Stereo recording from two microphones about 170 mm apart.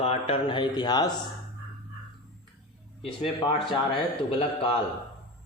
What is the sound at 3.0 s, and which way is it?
Speech, 30° left (ahead or behind).